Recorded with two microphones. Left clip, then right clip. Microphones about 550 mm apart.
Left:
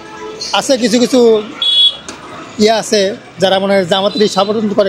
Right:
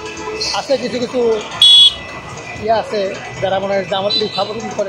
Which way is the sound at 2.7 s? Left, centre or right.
Left.